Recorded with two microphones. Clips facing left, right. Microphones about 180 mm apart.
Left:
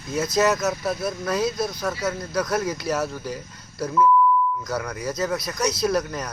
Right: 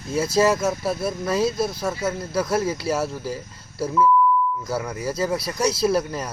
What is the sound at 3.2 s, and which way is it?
Speech, centre (ahead or behind).